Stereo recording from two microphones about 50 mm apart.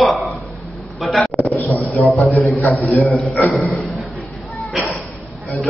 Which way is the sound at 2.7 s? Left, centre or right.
Left.